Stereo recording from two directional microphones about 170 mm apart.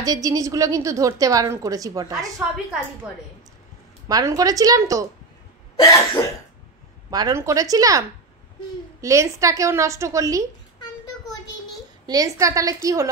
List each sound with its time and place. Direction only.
0.0 s a woman's voice: 20° right (ahead or behind)
4.1 s a woman's voice: 20° right (ahead or behind)
5.8 s cough: 20° left (ahead or behind)
7.1 s a woman's voice: 20° right (ahead or behind)
9.0 s a woman's voice: 20° right (ahead or behind)
12.1 s a woman's voice: 20° right (ahead or behind)